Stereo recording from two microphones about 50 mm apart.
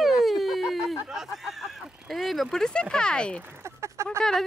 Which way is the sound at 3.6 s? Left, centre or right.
Right.